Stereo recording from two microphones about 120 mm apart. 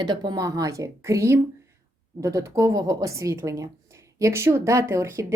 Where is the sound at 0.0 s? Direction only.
35° right (ahead or behind).